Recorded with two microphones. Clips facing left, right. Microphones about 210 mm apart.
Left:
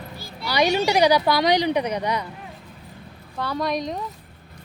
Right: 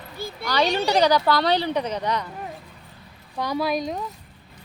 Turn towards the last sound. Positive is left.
turn(degrees=0)  # may be behind; listen again after turning